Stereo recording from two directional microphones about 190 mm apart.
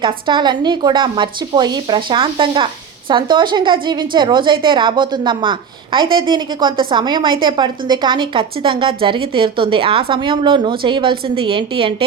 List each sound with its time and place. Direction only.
0.0 s a woman's voice: 25° right (ahead or behind)